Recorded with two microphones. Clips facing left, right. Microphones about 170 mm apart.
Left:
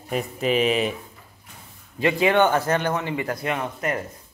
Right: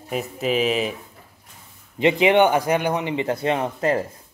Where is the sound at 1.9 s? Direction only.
20° right (ahead or behind).